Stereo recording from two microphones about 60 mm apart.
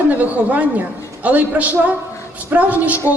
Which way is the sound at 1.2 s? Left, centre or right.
Right.